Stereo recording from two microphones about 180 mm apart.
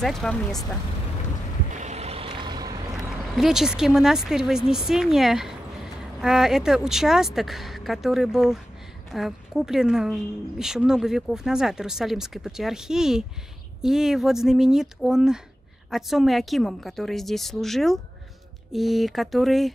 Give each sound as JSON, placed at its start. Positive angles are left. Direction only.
{"t": 0.0, "sound": "a woman's voice", "side_deg": 5}
{"t": 1.8, "sound": "vehicle", "side_deg": -35}
{"t": 3.0, "sound": "a woman's voice", "side_deg": 0}